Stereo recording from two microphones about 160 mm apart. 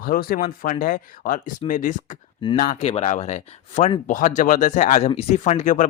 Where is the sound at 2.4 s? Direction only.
30° left (ahead or behind).